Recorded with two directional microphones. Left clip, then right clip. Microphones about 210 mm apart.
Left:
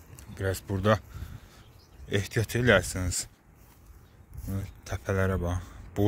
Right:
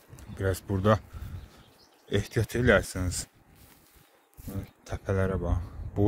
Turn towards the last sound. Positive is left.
turn(degrees=0)  # may be behind; listen again after turning